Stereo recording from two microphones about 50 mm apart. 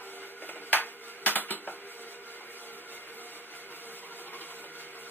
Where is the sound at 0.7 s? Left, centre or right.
Left.